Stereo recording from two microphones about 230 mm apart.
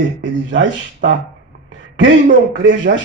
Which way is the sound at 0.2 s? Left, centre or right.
Right.